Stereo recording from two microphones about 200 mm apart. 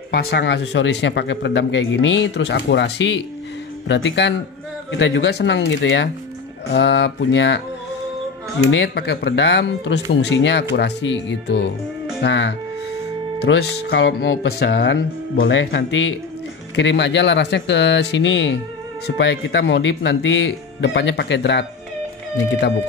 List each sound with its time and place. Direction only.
0.1 s speech: 55° left (ahead or behind)
8.6 s speech: 60° left (ahead or behind)
15.3 s speech: 70° left (ahead or behind)